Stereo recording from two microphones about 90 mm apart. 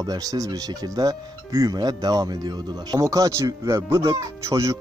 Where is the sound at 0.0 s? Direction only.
45° right (ahead or behind).